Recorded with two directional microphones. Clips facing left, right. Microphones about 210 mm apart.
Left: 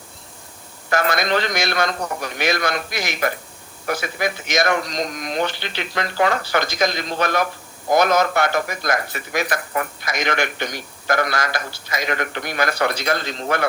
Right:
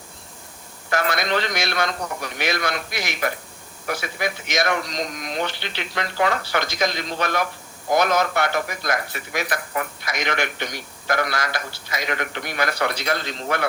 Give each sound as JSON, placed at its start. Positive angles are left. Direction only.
{"t": 0.9, "sound": "a man's voice", "side_deg": 45}